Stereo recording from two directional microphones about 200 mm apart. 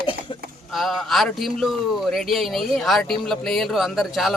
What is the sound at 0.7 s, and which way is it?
Speech, centre (ahead or behind).